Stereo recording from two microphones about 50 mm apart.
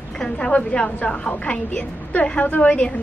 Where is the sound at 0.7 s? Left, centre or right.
Left.